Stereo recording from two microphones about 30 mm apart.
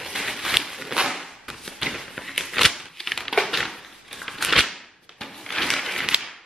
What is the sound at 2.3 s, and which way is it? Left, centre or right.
Crumpling, centre.